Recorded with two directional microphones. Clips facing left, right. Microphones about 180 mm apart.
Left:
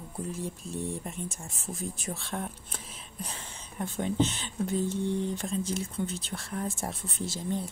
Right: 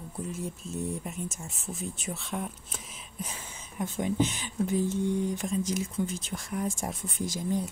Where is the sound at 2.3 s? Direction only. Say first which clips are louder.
Right 1 dB; 5° right (ahead or behind).